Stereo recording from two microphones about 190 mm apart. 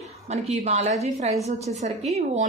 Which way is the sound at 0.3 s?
35° right (ahead or behind).